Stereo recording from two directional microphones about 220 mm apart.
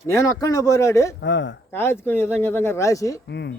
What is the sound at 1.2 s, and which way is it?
Speech, 55° left (ahead or behind).